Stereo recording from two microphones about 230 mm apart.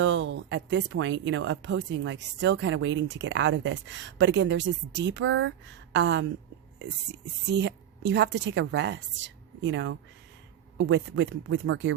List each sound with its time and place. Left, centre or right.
0.0 s speech: right
7.4 s a woman's voice: right